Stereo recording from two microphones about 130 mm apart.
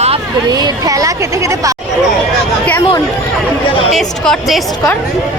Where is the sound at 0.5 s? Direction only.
30° right (ahead or behind).